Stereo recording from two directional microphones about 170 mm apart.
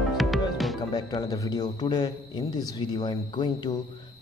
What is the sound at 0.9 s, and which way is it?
Speech, 25° left (ahead or behind).